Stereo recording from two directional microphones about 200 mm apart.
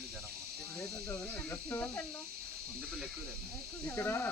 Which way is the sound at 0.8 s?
10° left (ahead or behind).